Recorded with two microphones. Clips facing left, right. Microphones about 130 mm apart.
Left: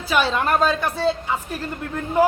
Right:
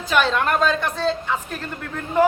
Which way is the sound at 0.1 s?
5° left (ahead or behind).